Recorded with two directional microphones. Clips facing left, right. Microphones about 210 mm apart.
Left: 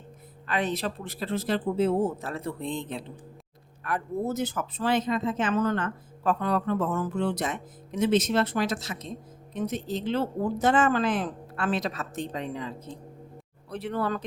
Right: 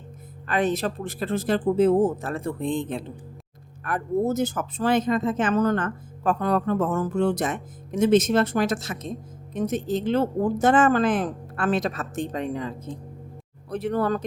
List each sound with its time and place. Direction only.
0.4 s speech: 45° right (ahead or behind)